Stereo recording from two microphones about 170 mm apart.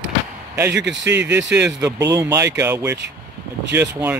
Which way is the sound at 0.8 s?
90° right.